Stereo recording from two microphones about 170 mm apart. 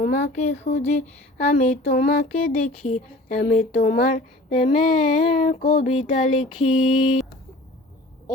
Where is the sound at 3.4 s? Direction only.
60° left (ahead or behind).